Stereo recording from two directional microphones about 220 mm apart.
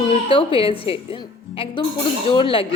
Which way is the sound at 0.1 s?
25° left (ahead or behind).